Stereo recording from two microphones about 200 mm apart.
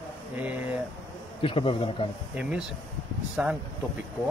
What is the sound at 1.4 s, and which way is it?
Speech, 25° left (ahead or behind).